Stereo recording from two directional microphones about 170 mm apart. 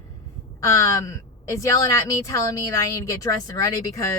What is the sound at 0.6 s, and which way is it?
A woman's voice, 20° left (ahead or behind).